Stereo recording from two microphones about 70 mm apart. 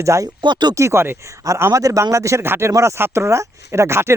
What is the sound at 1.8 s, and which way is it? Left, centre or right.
Speech, right.